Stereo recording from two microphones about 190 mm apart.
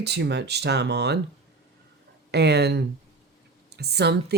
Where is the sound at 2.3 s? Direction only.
60° right (ahead or behind).